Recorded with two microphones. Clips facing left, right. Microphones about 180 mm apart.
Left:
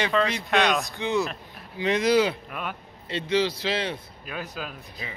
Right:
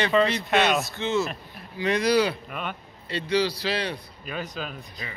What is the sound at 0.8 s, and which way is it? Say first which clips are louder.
Speech: even; 15° left (ahead or behind).